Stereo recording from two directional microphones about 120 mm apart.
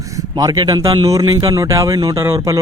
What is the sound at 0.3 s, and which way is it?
Speech, 30° right (ahead or behind).